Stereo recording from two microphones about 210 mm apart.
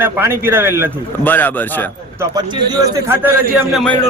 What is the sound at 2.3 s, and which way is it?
Speech, 15° right (ahead or behind).